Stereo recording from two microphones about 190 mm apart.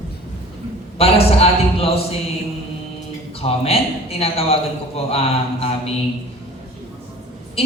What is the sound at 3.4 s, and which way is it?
A man's voice, 30° left (ahead or behind).